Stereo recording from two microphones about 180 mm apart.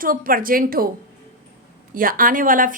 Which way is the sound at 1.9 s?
50° right (ahead or behind).